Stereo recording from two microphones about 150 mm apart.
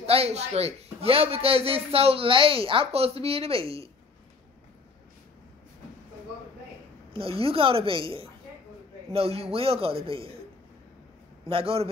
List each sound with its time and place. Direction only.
0.0 s a man's voice: 40° right (ahead or behind)
7.1 s a man's voice: 40° right (ahead or behind)
11.4 s a man's voice: 40° right (ahead or behind)